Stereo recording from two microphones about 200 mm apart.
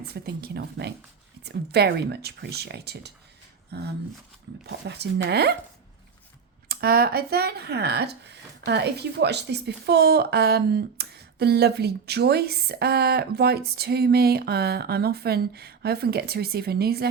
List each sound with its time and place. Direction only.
0.1 s speech: 50° right (ahead or behind)
6.7 s speech: 50° right (ahead or behind)